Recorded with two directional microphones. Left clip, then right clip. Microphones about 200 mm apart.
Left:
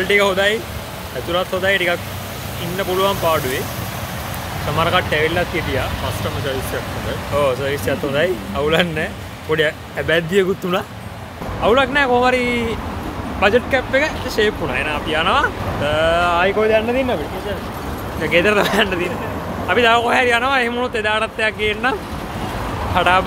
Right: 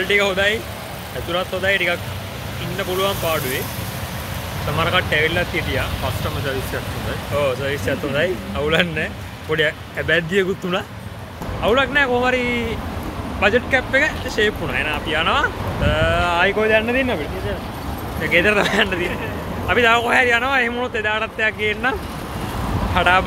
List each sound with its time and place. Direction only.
0.0 s speech: 15° left (ahead or behind)
4.7 s speech: 15° left (ahead or behind)
7.3 s speech: 15° left (ahead or behind); by 17.2 s 5° right (ahead or behind)
18.2 s speech: 5° left (ahead or behind)
22.9 s speech: centre (ahead or behind)